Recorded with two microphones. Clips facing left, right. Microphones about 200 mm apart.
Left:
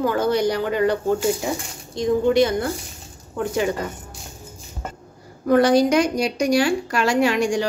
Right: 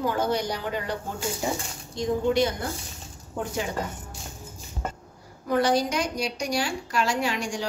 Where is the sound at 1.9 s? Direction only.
90° left.